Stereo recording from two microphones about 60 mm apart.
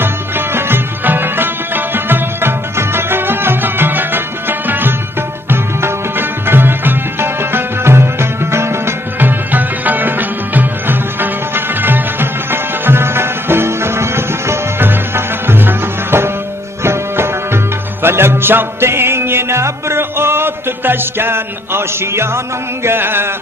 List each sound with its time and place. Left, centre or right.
0.0 s music: right
9.5 s music: right
22.8 s chant: right